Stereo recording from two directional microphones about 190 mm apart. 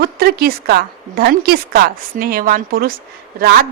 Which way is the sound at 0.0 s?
55° right (ahead or behind).